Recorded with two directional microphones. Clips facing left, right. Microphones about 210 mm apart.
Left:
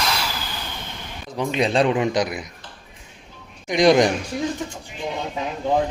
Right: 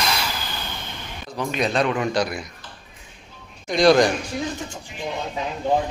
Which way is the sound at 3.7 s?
15° left (ahead or behind).